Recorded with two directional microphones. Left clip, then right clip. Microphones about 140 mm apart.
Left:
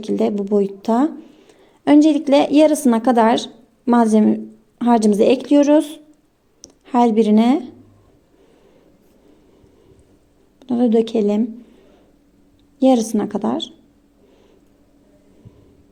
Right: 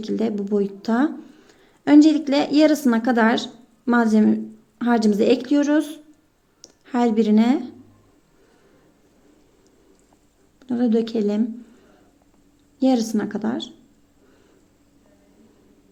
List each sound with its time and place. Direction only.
0.0 s a woman's voice: 20° left (ahead or behind)
1.2 s a sound: 5° left (ahead or behind)
1.5 s a woman's voice: 20° left (ahead or behind)
10.6 s a woman's voice: 20° left (ahead or behind)
12.8 s a woman's voice: 25° left (ahead or behind)